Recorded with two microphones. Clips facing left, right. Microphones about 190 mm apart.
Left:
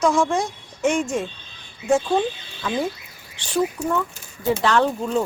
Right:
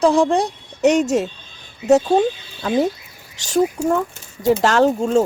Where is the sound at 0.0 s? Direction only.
35° right (ahead or behind).